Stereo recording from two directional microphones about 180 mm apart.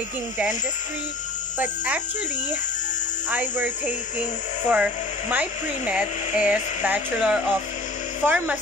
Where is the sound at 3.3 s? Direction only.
10° right (ahead or behind).